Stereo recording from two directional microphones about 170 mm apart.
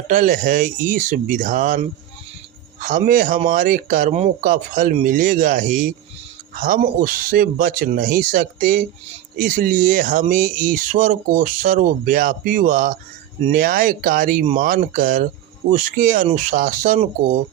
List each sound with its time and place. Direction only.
0.1 s speech: 50° right (ahead or behind)
2.8 s speech: 55° right (ahead or behind)